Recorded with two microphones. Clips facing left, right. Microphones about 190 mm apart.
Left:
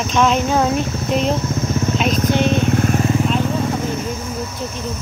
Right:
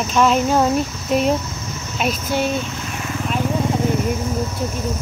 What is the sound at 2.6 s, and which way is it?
Vehicle, 55° left (ahead or behind).